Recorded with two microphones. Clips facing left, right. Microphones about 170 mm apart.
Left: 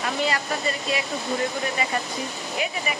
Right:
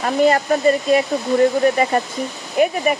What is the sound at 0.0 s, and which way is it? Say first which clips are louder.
Speech: right 10 dB; 45° right (ahead or behind).